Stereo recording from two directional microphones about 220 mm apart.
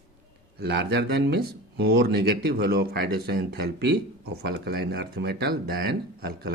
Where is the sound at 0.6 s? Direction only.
50° right (ahead or behind).